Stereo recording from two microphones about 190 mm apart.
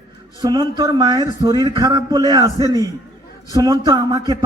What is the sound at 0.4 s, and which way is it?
A man's voice, 20° right (ahead or behind).